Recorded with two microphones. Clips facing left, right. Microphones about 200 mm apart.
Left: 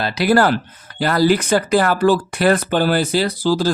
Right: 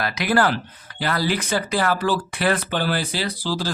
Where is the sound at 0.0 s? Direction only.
30° left (ahead or behind).